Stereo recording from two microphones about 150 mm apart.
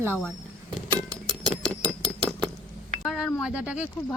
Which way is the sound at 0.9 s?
30° right (ahead or behind).